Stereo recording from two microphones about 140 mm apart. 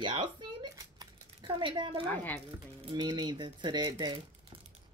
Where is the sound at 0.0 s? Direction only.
35° right (ahead or behind).